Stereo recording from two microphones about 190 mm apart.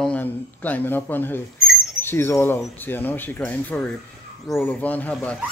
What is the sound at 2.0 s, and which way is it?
Speech, 10° left (ahead or behind).